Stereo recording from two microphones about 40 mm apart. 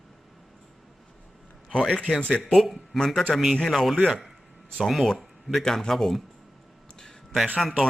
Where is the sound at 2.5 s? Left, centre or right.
Centre.